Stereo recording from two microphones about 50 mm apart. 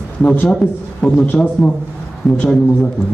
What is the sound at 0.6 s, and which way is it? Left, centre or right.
Speech, centre.